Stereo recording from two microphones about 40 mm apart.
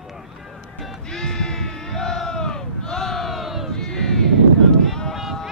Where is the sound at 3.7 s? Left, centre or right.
Centre.